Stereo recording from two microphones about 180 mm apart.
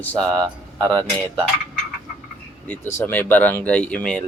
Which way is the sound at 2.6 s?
10° left (ahead or behind).